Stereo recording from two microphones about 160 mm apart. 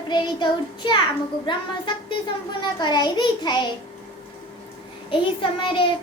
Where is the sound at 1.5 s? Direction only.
30° left (ahead or behind).